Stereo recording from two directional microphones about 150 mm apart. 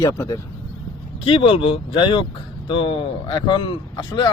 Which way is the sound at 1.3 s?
35° left (ahead or behind).